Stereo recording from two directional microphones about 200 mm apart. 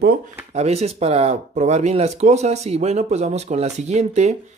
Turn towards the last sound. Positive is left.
turn(degrees=-35)  # may be behind; listen again after turning